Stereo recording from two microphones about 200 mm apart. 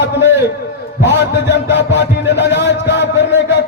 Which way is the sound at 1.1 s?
60° left (ahead or behind).